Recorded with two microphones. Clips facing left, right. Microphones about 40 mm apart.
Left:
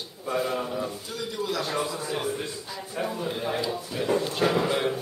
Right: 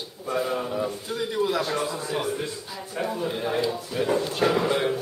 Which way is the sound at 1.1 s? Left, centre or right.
Right.